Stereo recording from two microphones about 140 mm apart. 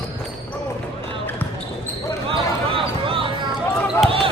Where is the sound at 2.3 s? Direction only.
40° right (ahead or behind).